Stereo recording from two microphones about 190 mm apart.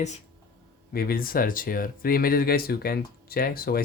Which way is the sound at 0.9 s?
50° left (ahead or behind).